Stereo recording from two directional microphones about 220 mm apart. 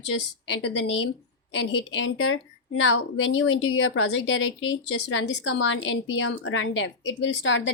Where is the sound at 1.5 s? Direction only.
60° left (ahead or behind).